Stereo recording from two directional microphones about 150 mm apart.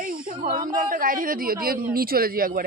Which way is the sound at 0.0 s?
70° right (ahead or behind).